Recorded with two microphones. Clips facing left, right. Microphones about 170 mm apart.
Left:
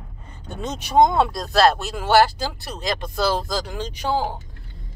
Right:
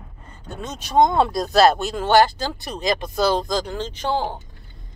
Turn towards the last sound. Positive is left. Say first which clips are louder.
# even
turn(degrees=5)  # may be behind; listen again after turning